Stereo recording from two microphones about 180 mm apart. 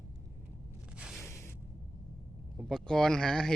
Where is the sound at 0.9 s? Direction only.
5° right (ahead or behind).